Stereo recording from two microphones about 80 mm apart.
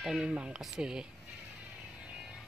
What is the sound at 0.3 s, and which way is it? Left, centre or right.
Speech, centre.